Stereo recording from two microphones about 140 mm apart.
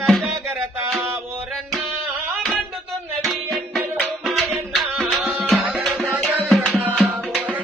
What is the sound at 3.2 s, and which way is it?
Music, centre (ahead or behind).